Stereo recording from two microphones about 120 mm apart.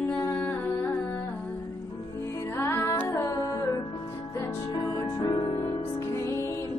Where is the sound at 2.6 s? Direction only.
20° left (ahead or behind).